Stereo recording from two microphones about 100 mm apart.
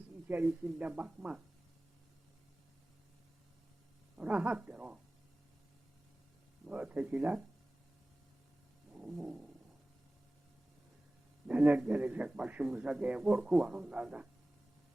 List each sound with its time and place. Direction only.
0.3 s a man's voice: 15° right (ahead or behind)
4.2 s a man's voice: 15° right (ahead or behind)
6.7 s a man's voice: 15° right (ahead or behind)
8.9 s a sound: 10° right (ahead or behind)
11.4 s a man's voice: 15° right (ahead or behind)